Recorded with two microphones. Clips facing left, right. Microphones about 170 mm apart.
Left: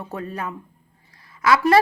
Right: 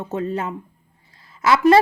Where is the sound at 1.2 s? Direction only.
25° right (ahead or behind).